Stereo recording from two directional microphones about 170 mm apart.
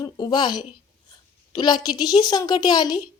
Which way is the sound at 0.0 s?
25° left (ahead or behind).